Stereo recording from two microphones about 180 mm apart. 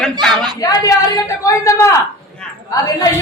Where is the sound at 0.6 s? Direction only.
20° left (ahead or behind).